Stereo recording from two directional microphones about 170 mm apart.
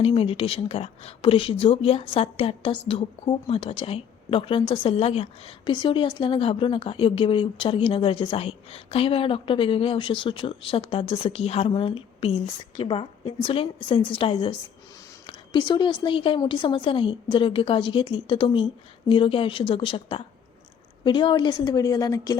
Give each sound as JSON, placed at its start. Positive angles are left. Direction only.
{"t": 0.0, "sound": "a woman's voice", "side_deg": 35}